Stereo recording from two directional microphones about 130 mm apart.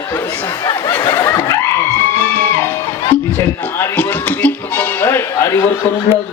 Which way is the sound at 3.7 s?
15° left (ahead or behind).